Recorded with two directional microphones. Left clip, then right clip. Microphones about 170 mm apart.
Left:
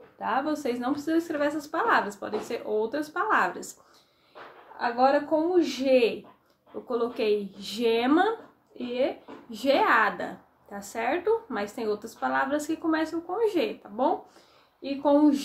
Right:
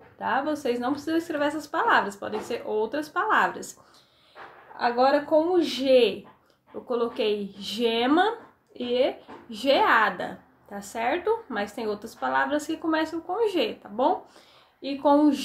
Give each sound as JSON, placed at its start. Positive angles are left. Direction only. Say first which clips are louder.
{"t": 0.2, "sound": "a woman's voice", "louder": "right 1 dB", "side_deg": 0}
{"t": 4.7, "sound": "a woman's voice", "louder": "right 1 dB", "side_deg": -10}